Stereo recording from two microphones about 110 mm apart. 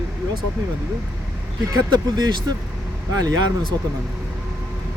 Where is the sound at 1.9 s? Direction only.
40° right (ahead or behind).